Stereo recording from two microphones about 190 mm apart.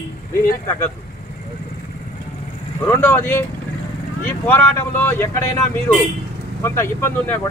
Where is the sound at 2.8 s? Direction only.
10° left (ahead or behind).